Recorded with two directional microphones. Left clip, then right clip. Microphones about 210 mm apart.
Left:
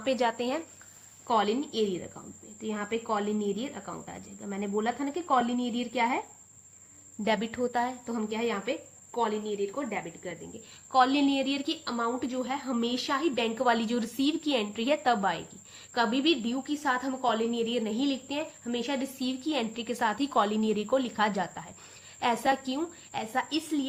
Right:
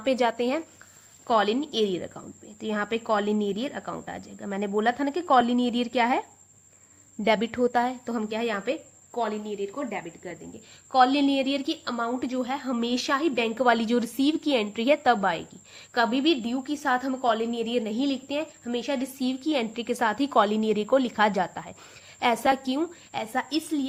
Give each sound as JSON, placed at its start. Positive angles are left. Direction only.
{"t": 0.0, "sound": "speech", "side_deg": -30}
{"t": 1.3, "sound": "a woman's voice", "side_deg": -40}
{"t": 7.3, "sound": "a woman's voice", "side_deg": -35}